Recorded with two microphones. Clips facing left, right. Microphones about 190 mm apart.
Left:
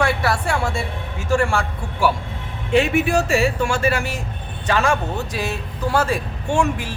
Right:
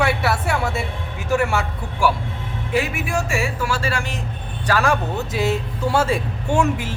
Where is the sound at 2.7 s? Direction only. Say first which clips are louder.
Left 6 dB; 30° left (ahead or behind).